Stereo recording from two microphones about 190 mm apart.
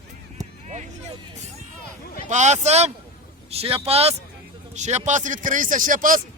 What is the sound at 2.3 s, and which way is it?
Speech, 40° right (ahead or behind).